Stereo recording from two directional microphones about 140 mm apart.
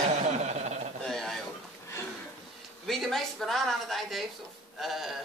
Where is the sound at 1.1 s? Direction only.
Centre (ahead or behind).